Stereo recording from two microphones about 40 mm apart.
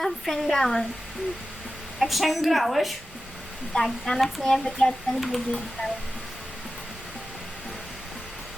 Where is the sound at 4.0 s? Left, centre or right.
Centre.